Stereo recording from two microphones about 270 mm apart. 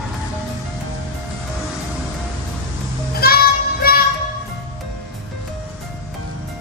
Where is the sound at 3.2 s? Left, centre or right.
Left.